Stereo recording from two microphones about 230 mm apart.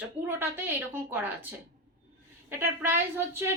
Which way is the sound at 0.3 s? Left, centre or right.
Centre.